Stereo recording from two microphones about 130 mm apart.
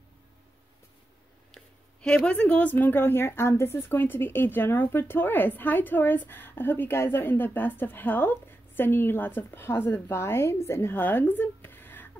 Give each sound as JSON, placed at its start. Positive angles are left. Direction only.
{"t": 1.5, "sound": "a woman's voice", "side_deg": 5}